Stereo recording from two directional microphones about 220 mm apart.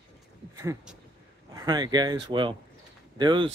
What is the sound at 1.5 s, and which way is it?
Speech, 15° right (ahead or behind).